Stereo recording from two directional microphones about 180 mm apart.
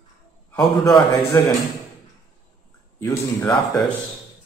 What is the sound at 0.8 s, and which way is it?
Speech, 20° left (ahead or behind).